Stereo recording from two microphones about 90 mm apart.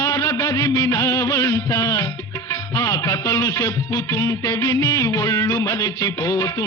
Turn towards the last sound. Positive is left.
turn(degrees=35)  # may be behind; listen again after turning